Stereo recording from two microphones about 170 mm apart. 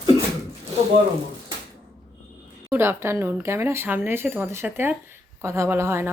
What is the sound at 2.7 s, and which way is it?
A woman's voice, 15° right (ahead or behind).